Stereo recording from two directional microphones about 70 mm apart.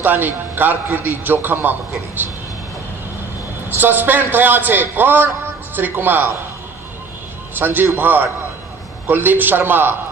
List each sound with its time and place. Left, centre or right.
0.0 s a man's voice: right
3.6 s a man's voice: right
7.5 s a man's voice: right